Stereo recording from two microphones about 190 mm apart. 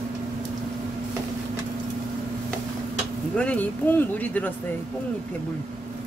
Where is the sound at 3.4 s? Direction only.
10° left (ahead or behind).